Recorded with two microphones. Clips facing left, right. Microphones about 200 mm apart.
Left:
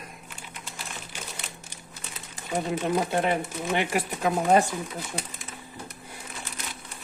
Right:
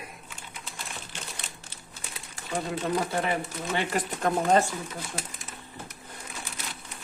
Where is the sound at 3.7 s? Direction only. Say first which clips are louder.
Left 2 dB; 10° left (ahead or behind).